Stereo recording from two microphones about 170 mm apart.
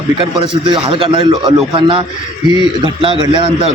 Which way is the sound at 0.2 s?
30° right (ahead or behind).